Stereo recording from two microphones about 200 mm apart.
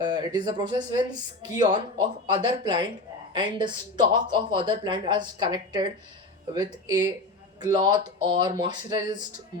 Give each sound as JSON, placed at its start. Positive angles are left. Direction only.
{"t": 0.0, "sound": "speech", "side_deg": -20}